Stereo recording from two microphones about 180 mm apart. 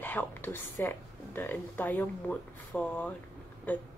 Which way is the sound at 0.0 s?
10° left (ahead or behind).